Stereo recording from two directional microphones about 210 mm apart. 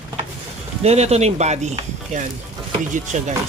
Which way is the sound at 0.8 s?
30° right (ahead or behind).